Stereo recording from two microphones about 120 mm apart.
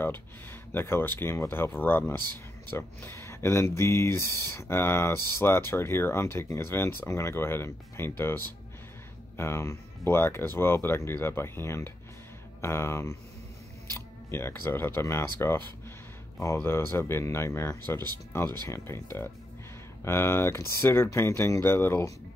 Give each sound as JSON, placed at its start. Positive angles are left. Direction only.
{"t": 0.7, "sound": "speech", "side_deg": 20}
{"t": 9.4, "sound": "speech", "side_deg": 20}